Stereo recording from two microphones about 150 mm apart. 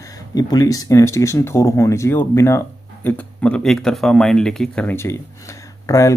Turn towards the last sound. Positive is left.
turn(degrees=20)  # may be behind; listen again after turning